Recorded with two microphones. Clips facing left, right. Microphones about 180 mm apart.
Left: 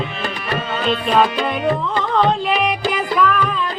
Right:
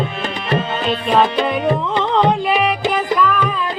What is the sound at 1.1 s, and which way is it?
Music, 20° right (ahead or behind).